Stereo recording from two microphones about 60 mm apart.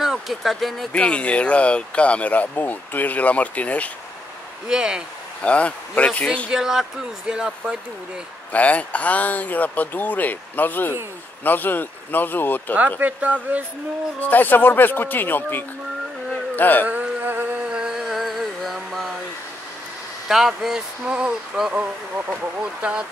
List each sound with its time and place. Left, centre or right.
0.0 s speech: centre
0.9 s speech: centre
4.6 s speech: centre
5.4 s speech: left
6.5 s speech: centre
8.5 s speech: left
13.0 s speech: right
14.2 s speech: left
16.8 s music: right
17.6 s a sound: centre
20.2 s speech: centre
21.7 s speech: right